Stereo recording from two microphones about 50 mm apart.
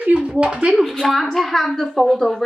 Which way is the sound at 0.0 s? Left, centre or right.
Right.